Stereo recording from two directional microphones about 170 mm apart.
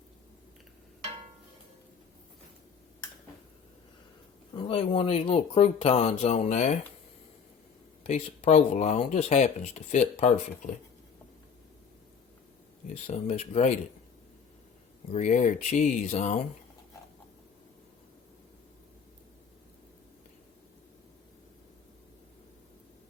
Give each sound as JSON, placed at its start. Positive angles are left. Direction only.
{"t": 4.5, "sound": "speech", "side_deg": 30}
{"t": 8.0, "sound": "speech", "side_deg": 40}
{"t": 12.9, "sound": "speech", "side_deg": 40}
{"t": 15.1, "sound": "speech", "side_deg": 45}